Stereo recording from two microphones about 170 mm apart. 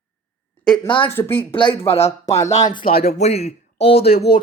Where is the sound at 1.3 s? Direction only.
30° left (ahead or behind).